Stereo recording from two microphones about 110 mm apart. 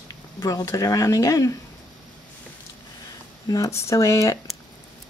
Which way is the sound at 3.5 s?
30° left (ahead or behind).